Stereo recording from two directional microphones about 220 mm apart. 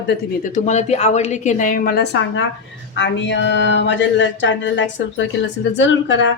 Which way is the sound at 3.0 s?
55° left (ahead or behind).